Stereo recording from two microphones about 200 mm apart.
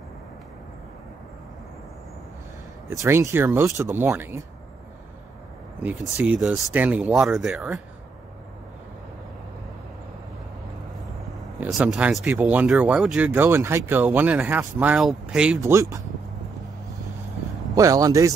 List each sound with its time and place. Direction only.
2.9 s speech: 15° right (ahead or behind)
5.8 s speech: 10° right (ahead or behind)
11.6 s speech: 5° right (ahead or behind)
17.7 s speech: 15° right (ahead or behind)